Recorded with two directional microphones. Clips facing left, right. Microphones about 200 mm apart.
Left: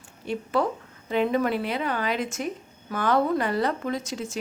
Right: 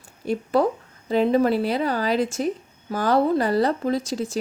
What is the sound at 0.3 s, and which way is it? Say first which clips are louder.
A woman's voice: right 5 dB; 35° right (ahead or behind).